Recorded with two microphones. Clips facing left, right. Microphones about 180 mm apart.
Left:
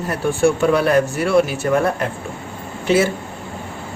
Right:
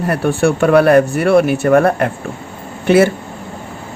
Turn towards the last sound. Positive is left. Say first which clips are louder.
# right 6 dB
turn(degrees=-60)  # may be behind; listen again after turning